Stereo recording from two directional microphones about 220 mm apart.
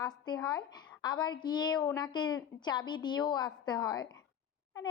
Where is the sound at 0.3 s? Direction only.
15° left (ahead or behind).